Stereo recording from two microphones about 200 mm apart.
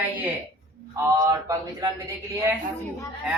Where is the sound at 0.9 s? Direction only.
15° right (ahead or behind).